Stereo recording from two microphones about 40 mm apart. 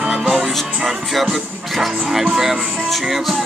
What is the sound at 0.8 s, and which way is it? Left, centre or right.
Music, centre.